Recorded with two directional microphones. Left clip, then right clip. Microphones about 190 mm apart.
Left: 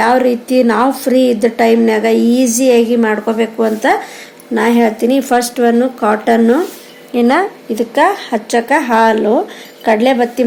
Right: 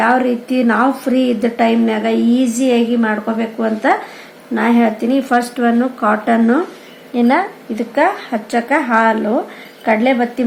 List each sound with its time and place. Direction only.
0.0 s a woman's voice: 35° left (ahead or behind)